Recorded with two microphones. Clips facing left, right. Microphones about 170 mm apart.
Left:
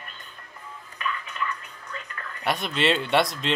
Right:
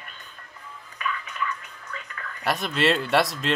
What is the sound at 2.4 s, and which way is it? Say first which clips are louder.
Speech: right 1 dB; centre (ahead or behind).